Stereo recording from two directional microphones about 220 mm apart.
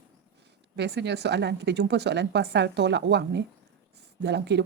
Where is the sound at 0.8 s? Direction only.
50° right (ahead or behind).